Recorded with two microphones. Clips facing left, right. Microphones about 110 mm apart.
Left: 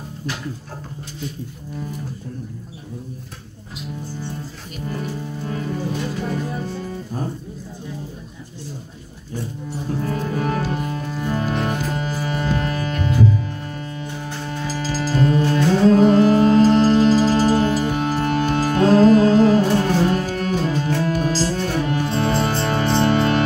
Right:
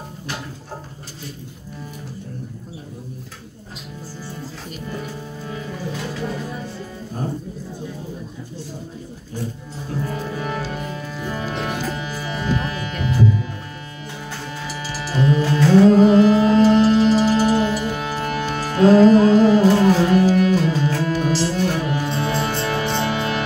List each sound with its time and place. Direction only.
10.0 s music: 45° left (ahead or behind)
14.7 s music: 35° left (ahead or behind)